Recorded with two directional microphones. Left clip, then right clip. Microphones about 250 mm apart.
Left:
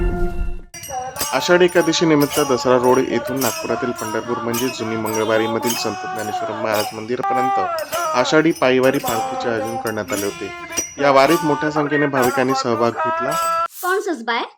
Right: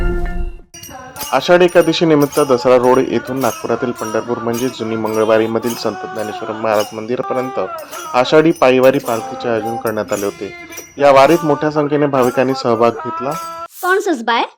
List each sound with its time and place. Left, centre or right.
1.3 s a man's voice: centre
13.0 s speech: centre
13.9 s speech: right